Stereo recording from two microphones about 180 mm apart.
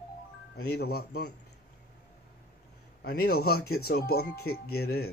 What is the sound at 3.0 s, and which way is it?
Speech, 60° left (ahead or behind).